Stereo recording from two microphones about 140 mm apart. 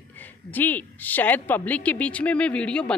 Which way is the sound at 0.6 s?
10° left (ahead or behind).